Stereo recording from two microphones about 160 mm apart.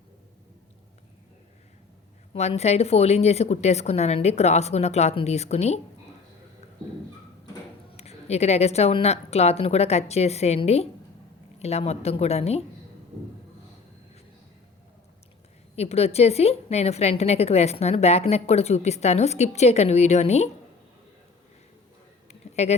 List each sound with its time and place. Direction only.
2.3 s a woman's voice: 40° left (ahead or behind)
7.9 s a woman's voice: 40° left (ahead or behind)
15.7 s a woman's voice: 40° left (ahead or behind)
22.3 s a sound: 45° left (ahead or behind)